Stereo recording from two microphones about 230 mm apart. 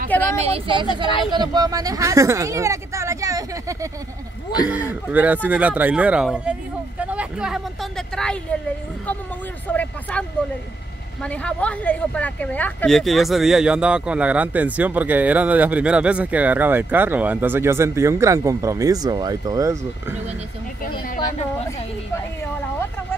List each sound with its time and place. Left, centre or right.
0.4 s speech: right; by 8.5 s centre
9.7 s speech: centre
11.2 s speech: centre
20.8 s a sound: left